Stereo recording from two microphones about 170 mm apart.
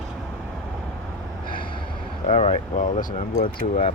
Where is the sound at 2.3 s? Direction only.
45° left (ahead or behind).